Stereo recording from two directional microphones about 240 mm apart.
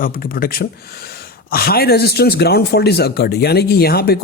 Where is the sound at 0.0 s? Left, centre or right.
Left.